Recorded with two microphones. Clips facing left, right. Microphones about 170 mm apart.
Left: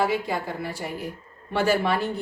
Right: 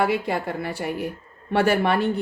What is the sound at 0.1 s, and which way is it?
A woman's voice, 60° right (ahead or behind).